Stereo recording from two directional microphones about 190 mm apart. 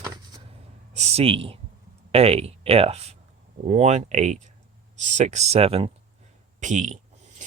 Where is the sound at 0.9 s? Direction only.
35° right (ahead or behind).